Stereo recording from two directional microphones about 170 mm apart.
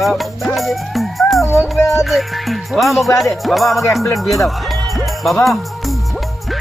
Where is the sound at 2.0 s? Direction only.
Centre (ahead or behind).